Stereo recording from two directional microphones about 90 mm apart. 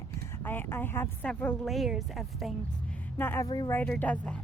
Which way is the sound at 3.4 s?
45° left (ahead or behind).